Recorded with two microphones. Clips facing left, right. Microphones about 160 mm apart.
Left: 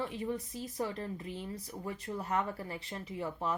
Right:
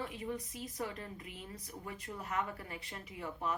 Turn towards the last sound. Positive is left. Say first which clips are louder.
# left 4 dB
turn(degrees=30)  # may be behind; listen again after turning